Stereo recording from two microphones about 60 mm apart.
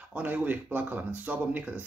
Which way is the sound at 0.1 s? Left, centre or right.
Right.